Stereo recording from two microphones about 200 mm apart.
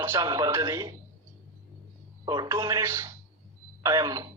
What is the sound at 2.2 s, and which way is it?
Speech, 20° right (ahead or behind).